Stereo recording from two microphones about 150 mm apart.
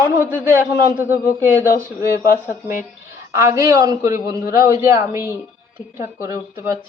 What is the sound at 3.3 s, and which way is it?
A man's voice, 20° right (ahead or behind).